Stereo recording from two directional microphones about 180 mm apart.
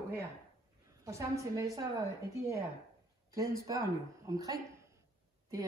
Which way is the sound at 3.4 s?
20° right (ahead or behind).